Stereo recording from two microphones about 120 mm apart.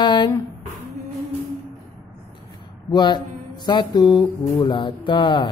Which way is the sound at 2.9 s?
40° left (ahead or behind).